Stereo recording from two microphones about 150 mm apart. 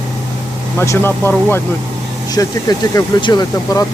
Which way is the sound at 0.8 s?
15° left (ahead or behind).